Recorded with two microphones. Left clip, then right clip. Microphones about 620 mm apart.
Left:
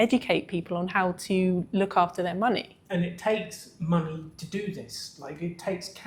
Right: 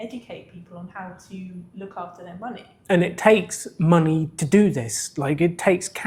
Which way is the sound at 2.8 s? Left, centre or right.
Right.